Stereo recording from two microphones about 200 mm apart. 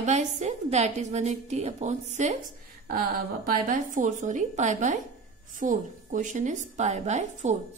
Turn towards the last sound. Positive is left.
turn(degrees=-35)  # may be behind; listen again after turning